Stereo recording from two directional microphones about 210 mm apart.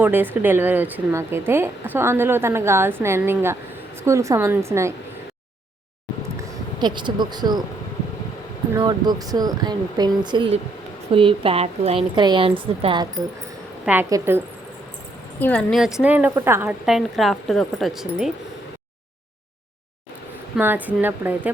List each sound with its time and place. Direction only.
0.0 s a woman's voice: 10° right (ahead or behind)
6.7 s a woman's voice: 20° right (ahead or behind)
8.7 s a woman's voice: 20° right (ahead or behind)
13.8 s a woman's voice: 10° right (ahead or behind)
15.4 s a woman's voice: 5° left (ahead or behind)
20.6 s a woman's voice: 10° right (ahead or behind)